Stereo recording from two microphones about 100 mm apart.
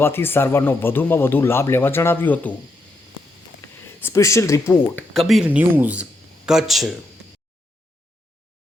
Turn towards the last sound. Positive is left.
turn(degrees=-5)  # may be behind; listen again after turning